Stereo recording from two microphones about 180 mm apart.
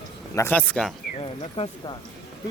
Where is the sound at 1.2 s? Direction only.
30° left (ahead or behind).